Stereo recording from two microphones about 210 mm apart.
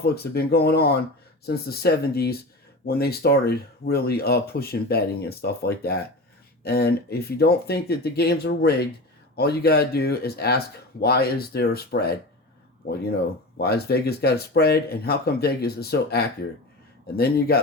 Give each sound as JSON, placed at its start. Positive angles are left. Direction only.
{"t": 0.0, "sound": "speech", "side_deg": 50}